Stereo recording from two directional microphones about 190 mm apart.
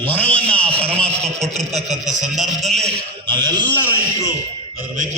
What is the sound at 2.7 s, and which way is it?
Speech, centre (ahead or behind).